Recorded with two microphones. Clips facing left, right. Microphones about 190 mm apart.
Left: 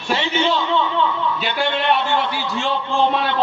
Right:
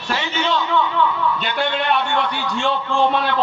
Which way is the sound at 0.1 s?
25° left (ahead or behind).